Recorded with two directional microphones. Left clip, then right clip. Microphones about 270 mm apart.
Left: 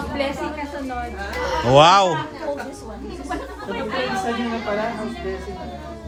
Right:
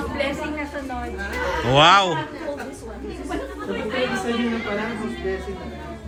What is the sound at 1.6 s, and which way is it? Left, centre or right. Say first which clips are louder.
Speech: left 2 dB; centre.